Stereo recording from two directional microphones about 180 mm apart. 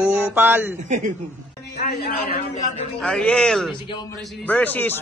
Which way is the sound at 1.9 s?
55° left (ahead or behind).